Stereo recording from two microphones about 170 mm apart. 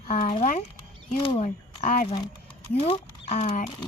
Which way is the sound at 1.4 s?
55° left (ahead or behind).